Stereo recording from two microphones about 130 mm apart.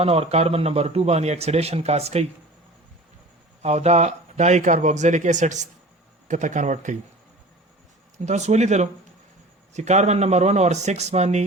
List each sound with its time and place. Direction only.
0.0 s speech: 50° right (ahead or behind)
3.6 s speech: 55° right (ahead or behind)
8.2 s speech: 60° right (ahead or behind)